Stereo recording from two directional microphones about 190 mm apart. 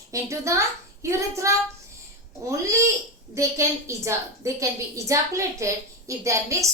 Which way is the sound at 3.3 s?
15° right (ahead or behind).